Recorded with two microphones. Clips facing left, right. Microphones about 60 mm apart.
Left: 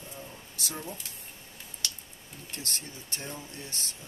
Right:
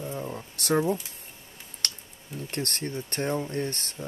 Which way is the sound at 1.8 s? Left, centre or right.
Right.